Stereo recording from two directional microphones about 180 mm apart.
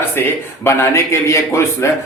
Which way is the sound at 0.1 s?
15° left (ahead or behind).